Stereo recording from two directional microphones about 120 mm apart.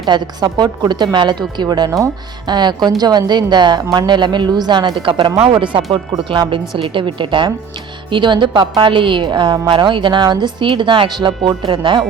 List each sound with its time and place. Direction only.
0.0 s a woman's voice: 35° right (ahead or behind)